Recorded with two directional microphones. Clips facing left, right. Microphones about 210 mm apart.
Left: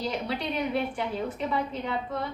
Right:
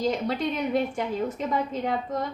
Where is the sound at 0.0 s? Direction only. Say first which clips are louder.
Right 5 dB; 45° right (ahead or behind).